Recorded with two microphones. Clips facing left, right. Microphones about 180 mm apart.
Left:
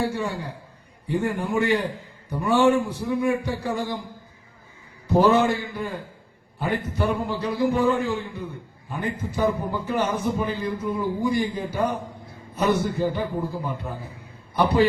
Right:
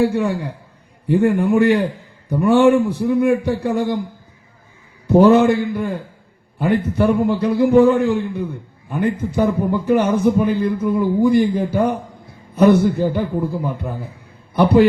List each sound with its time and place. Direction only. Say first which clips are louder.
0.1 s a man's voice: right 8 dB; 60° right (ahead or behind)
5.0 s a man's voice: right 7 dB; 60° right (ahead or behind)